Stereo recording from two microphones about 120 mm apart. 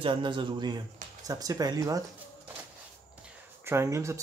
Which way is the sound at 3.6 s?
25° right (ahead or behind).